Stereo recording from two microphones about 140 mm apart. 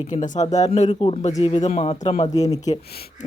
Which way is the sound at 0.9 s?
40° left (ahead or behind).